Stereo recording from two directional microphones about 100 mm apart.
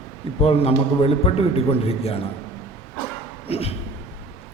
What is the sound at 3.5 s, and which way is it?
Speech, 80° left.